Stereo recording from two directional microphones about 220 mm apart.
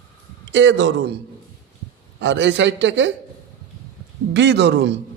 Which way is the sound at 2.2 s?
55° right (ahead or behind).